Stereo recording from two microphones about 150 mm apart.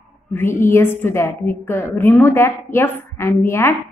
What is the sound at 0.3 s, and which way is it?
A woman's voice, 15° left (ahead or behind).